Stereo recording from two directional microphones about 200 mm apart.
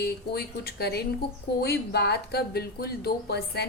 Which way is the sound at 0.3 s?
55° left (ahead or behind).